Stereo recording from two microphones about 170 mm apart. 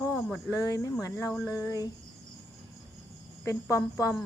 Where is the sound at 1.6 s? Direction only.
20° left (ahead or behind).